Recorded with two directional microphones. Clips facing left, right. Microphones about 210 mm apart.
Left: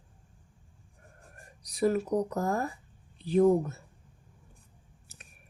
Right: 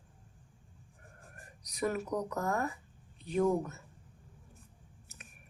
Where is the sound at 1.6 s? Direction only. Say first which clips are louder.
Left 7 dB; 30° left (ahead or behind).